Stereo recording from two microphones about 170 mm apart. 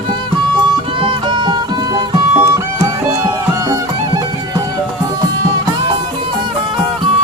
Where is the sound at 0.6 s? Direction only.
25° right (ahead or behind).